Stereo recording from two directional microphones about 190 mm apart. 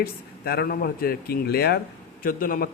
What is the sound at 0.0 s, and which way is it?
Speech, 55° left (ahead or behind).